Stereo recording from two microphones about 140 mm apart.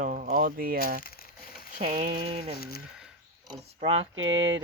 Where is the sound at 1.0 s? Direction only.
90° left.